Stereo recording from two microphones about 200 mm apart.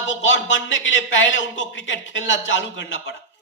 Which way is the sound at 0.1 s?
70° left (ahead or behind).